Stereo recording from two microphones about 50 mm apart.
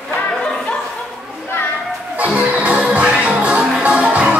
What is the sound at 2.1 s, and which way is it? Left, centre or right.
Music, right.